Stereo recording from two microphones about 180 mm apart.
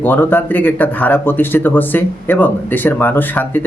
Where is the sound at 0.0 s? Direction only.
10° left (ahead or behind).